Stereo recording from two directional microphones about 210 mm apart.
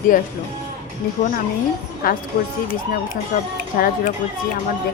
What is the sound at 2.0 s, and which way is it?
Speech, 45° left (ahead or behind).